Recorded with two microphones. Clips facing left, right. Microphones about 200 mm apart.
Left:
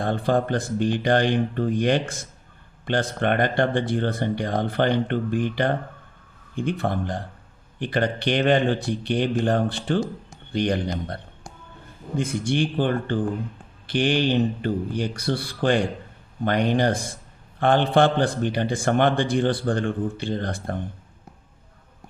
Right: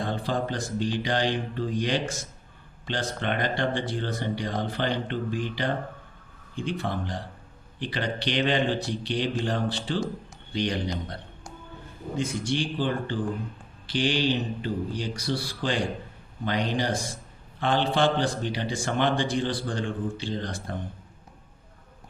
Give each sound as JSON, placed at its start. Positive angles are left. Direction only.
{"t": 0.0, "sound": "a man's voice", "side_deg": 55}